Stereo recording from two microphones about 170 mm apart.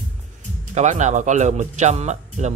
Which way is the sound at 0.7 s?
45° right (ahead or behind).